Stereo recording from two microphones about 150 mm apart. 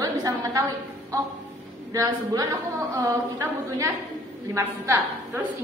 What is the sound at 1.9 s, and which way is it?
Speech, 25° right (ahead or behind).